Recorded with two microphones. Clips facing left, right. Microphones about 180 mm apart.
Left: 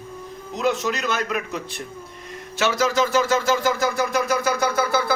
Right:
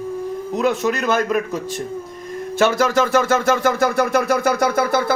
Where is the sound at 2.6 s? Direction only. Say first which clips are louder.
Right 4 dB; 55° right (ahead or behind).